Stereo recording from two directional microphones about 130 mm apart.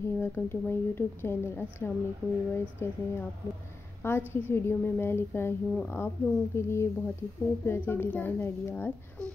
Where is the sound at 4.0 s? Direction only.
15° left (ahead or behind).